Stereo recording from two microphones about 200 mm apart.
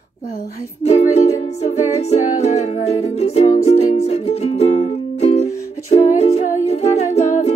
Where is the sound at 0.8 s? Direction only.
30° left (ahead or behind).